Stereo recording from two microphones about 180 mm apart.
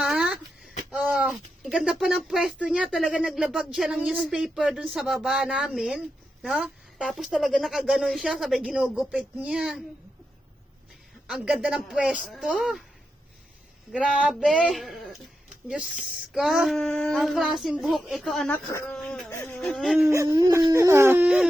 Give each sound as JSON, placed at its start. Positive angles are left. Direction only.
{"t": 0.0, "sound": "a sound", "side_deg": -5}
{"t": 0.9, "sound": "speech", "side_deg": -5}
{"t": 11.3, "sound": "speech", "side_deg": -5}
{"t": 13.9, "sound": "speech", "side_deg": -5}
{"t": 19.3, "sound": "a sound", "side_deg": 15}
{"t": 19.5, "sound": "speech", "side_deg": 5}
{"t": 20.1, "sound": "howl", "side_deg": -20}